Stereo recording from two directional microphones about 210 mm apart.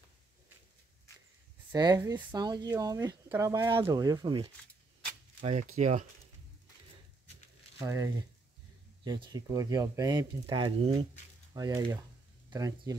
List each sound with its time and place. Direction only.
1.7 s speech: 20° right (ahead or behind); by 6.0 s 35° right (ahead or behind)
7.8 s speech: 15° right (ahead or behind)